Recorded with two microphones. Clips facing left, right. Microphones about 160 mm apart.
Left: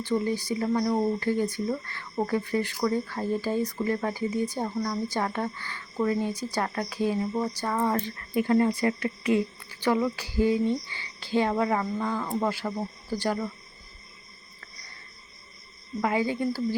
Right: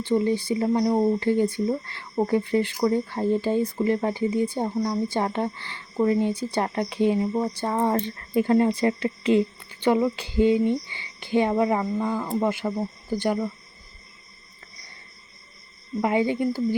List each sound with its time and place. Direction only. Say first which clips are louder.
0.0 s a woman's voice: right 4 dB; 25° right (ahead or behind)
16.0 s a woman's voice: right 4 dB; 20° right (ahead or behind)